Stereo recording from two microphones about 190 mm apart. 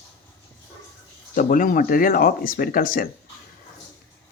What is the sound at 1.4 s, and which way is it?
Speech, 45° left (ahead or behind).